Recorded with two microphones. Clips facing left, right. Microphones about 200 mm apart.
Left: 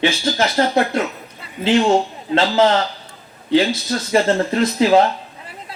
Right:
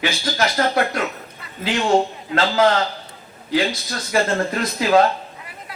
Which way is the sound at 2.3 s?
30° left (ahead or behind).